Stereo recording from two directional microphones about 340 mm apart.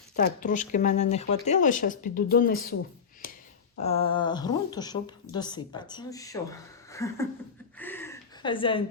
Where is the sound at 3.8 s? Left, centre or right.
Centre.